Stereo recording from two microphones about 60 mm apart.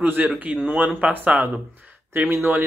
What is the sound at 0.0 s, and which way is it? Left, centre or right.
A man's voice, right.